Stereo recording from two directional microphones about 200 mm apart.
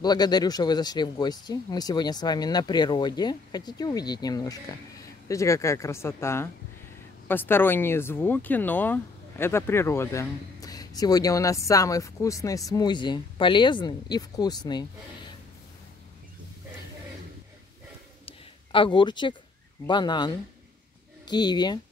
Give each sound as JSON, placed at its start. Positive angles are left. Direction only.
{"t": 0.0, "sound": "speech", "side_deg": 20}
{"t": 18.2, "sound": "a sound", "side_deg": 25}
{"t": 19.9, "sound": "speech", "side_deg": 20}